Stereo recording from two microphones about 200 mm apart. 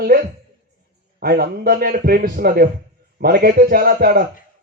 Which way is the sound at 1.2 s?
50° right (ahead or behind).